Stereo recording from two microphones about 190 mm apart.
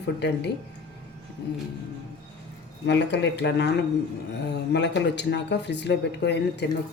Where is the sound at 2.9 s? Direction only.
65° left (ahead or behind).